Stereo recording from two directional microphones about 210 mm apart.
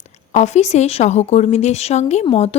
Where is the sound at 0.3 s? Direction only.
35° left (ahead or behind).